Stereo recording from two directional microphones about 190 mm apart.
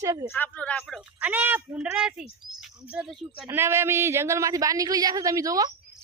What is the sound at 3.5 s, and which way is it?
A woman's voice, 10° right (ahead or behind).